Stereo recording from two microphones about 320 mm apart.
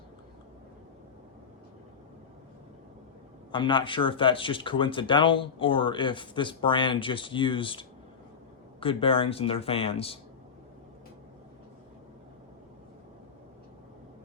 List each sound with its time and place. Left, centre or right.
3.5 s speech: centre